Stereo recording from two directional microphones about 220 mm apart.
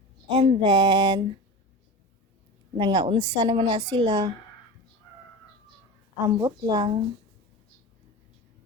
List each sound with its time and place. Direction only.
0.3 s a woman's voice: 25° right (ahead or behind)
2.7 s a woman's voice: 20° right (ahead or behind)
6.2 s speech: 15° right (ahead or behind)